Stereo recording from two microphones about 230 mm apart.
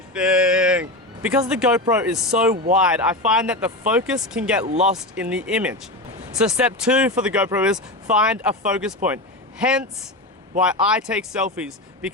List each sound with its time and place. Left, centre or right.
0.1 s a sound: centre
1.5 s speech: centre
4.6 s speech: right
4.9 s a man's voice: centre